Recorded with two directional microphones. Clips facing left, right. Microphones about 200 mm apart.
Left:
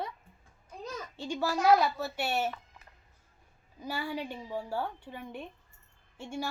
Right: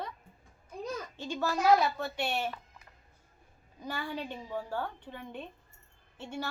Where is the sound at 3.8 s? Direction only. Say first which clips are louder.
Left 2 dB; 10° left (ahead or behind).